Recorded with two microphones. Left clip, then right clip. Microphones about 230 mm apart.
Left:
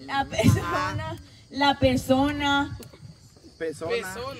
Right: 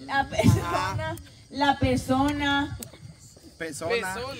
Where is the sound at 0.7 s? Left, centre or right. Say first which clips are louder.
Even; right.